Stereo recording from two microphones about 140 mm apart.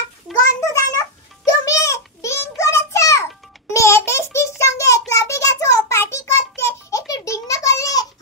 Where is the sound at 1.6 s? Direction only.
20° left (ahead or behind).